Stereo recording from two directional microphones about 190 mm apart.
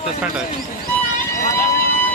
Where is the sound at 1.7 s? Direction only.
50° left (ahead or behind).